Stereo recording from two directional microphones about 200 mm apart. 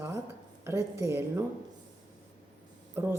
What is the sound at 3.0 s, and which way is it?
Speech, 10° right (ahead or behind).